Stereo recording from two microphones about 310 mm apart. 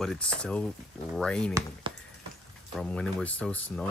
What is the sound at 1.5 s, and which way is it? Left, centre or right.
Speech, centre.